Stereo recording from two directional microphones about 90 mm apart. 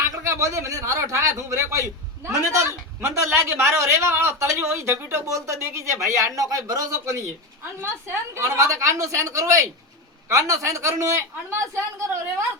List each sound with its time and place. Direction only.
0.1 s a man's voice: 35° right (ahead or behind)